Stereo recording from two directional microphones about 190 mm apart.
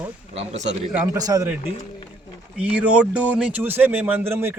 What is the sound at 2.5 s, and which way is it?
Speech, 5° right (ahead or behind).